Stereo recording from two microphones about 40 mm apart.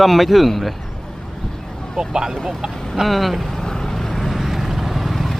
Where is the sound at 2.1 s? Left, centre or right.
Centre.